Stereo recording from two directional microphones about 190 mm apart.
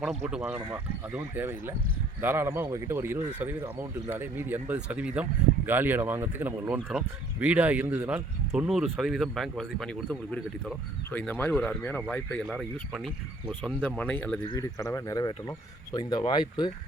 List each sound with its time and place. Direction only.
0.0 s speech: 5° right (ahead or behind)
14.5 s speech: 20° left (ahead or behind)